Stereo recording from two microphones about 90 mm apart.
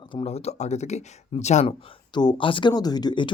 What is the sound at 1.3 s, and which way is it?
Speech, 90° left.